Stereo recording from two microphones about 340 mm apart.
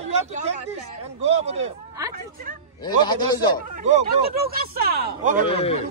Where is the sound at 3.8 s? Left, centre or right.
Right.